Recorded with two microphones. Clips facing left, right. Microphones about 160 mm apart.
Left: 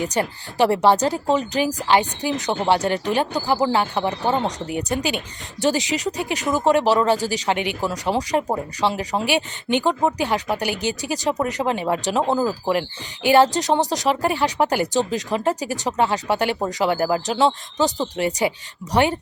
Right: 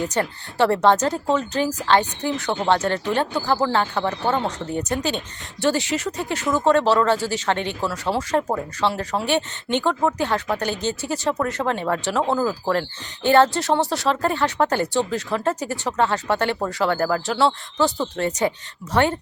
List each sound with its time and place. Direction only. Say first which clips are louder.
0.0 s speech: left 1 dB; 15° left (ahead or behind)